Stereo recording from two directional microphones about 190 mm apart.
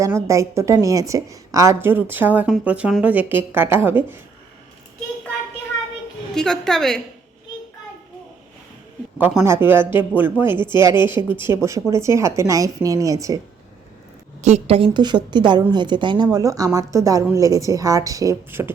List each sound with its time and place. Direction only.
0.0 s a woman's voice: 15° right (ahead or behind)
6.3 s a woman's voice: 5° left (ahead or behind)
9.1 s a woman's voice: 10° right (ahead or behind)
14.4 s a woman's voice: 35° right (ahead or behind); by 18.7 s 15° right (ahead or behind)